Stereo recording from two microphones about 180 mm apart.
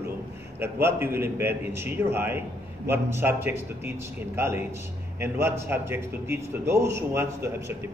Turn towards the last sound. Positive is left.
turn(degrees=-15)  # may be behind; listen again after turning